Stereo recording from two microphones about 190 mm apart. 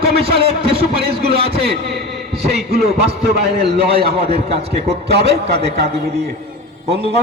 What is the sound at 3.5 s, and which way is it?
A man's voice, 55° right (ahead or behind).